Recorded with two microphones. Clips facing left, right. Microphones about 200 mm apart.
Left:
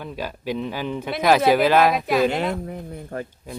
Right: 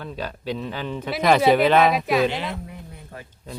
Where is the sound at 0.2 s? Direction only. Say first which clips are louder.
Left 2 dB; 10° left (ahead or behind).